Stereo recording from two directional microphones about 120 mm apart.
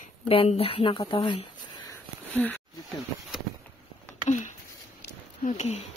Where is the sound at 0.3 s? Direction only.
55° left (ahead or behind).